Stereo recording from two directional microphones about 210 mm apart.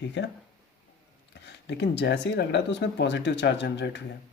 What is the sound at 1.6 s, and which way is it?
Speech, 55° left (ahead or behind).